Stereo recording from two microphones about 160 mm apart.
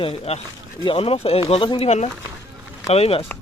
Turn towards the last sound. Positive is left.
turn(degrees=40)  # may be behind; listen again after turning